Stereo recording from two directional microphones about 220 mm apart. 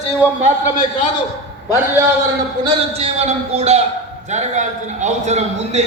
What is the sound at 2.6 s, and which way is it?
A man's voice, 30° right (ahead or behind).